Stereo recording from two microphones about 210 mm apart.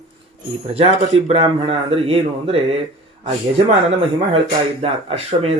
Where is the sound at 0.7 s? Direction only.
25° right (ahead or behind).